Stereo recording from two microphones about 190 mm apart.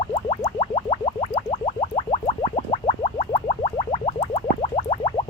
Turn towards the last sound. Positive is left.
turn(degrees=30)  # may be behind; listen again after turning